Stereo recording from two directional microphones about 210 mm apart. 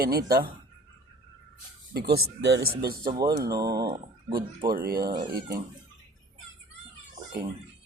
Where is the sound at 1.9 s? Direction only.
50° right (ahead or behind).